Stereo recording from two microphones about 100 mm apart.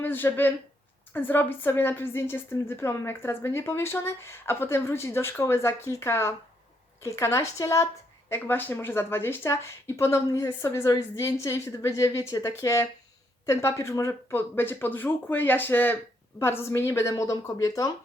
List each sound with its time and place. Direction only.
0.0 s a woman's voice: 20° left (ahead or behind)